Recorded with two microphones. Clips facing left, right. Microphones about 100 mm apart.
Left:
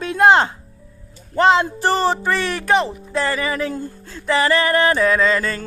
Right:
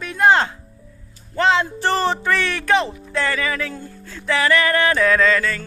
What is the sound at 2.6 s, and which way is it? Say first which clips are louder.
Speech: left 1 dB; 5° left (ahead or behind).